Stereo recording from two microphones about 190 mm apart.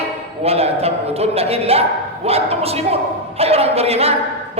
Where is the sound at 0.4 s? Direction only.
30° right (ahead or behind).